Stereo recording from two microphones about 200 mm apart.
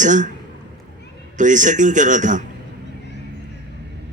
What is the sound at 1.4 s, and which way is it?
A man's voice, 40° right (ahead or behind).